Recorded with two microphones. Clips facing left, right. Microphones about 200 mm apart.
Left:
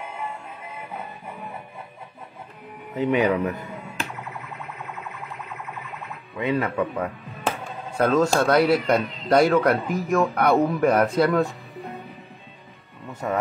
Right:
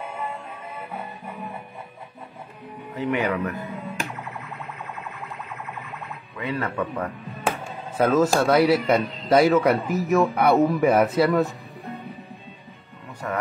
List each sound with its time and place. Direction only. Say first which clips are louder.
2.9 s speech: left 4 dB; 20° left (ahead or behind)
3.6 s music: right 2 dB; 15° right (ahead or behind)
6.3 s speech: left 4 dB; 20° left (ahead or behind)
8.0 s speech: even; 5° right (ahead or behind)
13.2 s speech: left 3 dB; 20° left (ahead or behind)